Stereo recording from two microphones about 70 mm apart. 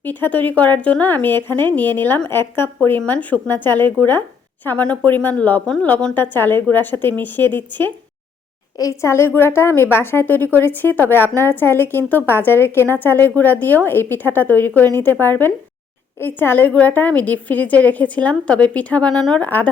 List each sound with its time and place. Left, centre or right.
0.0 s a woman's voice: left
6.3 s a woman's voice: left
8.8 s a woman's voice: left; by 19.2 s centre
19.4 s a woman's voice: left